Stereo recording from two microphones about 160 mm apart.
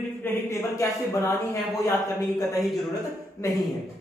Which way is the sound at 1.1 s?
20° left (ahead or behind).